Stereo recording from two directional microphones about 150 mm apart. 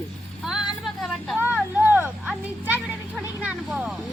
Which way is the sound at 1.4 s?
10° right (ahead or behind).